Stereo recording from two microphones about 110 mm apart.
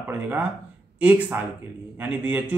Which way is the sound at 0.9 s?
15° right (ahead or behind).